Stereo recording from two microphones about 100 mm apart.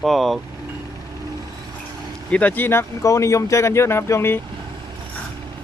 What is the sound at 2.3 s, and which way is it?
Speech, 15° left (ahead or behind).